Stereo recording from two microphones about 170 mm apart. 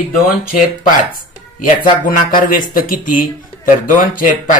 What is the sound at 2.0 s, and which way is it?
Speech, 55° left (ahead or behind).